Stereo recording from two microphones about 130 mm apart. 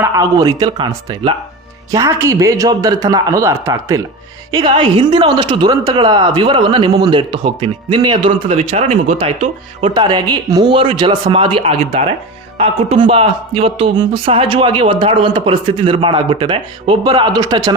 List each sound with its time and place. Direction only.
0.0 s a man's voice: 25° right (ahead or behind)
1.9 s a man's voice: 25° right (ahead or behind)
4.5 s speech: 35° right (ahead or behind)
8.4 s a man's voice: 55° right (ahead or behind)
9.1 s speech: 45° right (ahead or behind)
9.9 s speech: 35° right (ahead or behind)